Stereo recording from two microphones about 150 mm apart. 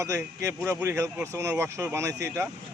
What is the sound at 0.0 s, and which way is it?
A man's voice, 20° right (ahead or behind).